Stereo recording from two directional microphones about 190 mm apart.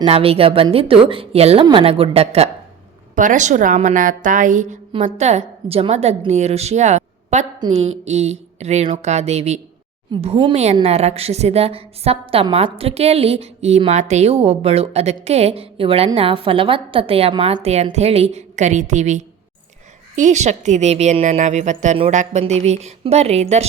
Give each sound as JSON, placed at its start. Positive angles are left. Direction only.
{"t": 0.0, "sound": "a woman's voice", "side_deg": -30}